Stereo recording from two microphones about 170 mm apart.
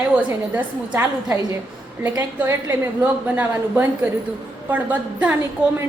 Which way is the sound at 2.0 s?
15° right (ahead or behind).